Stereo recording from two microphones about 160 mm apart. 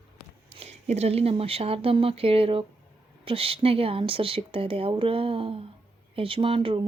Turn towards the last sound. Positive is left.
turn(degrees=-35)  # may be behind; listen again after turning